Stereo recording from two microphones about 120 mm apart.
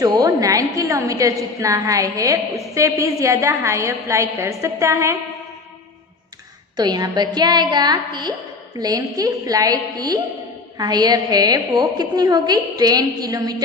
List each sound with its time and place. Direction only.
0.0 s a woman's voice: 30° right (ahead or behind)
6.8 s a woman's voice: 35° right (ahead or behind)